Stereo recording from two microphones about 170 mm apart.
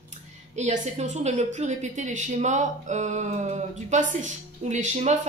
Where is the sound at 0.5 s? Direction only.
45° right (ahead or behind).